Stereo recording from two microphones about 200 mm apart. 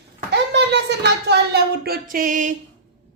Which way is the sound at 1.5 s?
50° right (ahead or behind).